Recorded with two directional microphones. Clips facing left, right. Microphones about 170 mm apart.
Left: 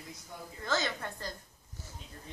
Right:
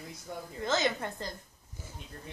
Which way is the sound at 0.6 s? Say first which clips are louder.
Right 4 dB; 20° right (ahead or behind).